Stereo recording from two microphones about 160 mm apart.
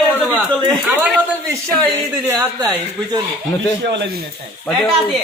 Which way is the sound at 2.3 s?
20° right (ahead or behind).